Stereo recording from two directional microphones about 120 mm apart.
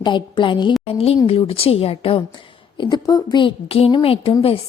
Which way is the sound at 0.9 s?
55° left (ahead or behind).